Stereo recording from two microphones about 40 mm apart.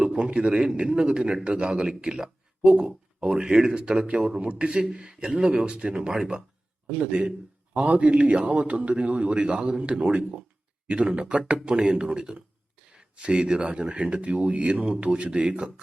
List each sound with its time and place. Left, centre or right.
0.0 s a sound: right
0.4 s a man's voice: right
9.2 s a man's voice: right
11.5 s a man's voice: centre